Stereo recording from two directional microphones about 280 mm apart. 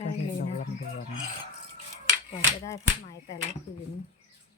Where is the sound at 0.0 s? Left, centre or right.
Left.